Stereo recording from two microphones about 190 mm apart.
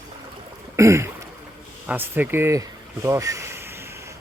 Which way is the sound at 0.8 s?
15° right (ahead or behind).